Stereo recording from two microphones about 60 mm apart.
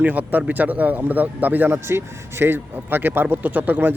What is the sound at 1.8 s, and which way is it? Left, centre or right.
A man's voice, right.